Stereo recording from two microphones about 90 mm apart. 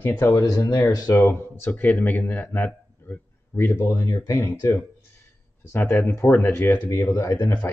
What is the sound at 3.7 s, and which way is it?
Speech, 40° left (ahead or behind).